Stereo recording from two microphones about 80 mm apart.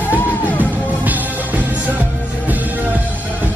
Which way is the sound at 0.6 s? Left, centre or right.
Right.